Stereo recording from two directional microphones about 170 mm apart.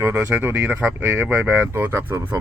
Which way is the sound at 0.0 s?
15° right (ahead or behind).